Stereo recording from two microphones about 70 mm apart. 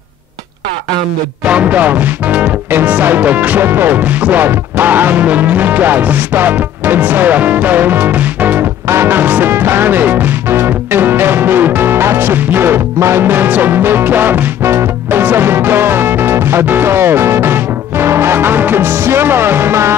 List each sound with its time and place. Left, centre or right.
1.4 s speech: centre
8.8 s music: right